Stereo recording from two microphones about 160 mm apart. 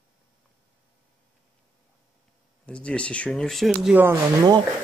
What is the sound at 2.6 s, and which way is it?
Speech, 5° left (ahead or behind).